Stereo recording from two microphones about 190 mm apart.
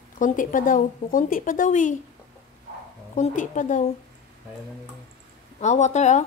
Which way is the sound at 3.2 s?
40° left (ahead or behind).